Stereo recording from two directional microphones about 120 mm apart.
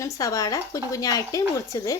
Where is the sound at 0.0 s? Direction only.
30° left (ahead or behind).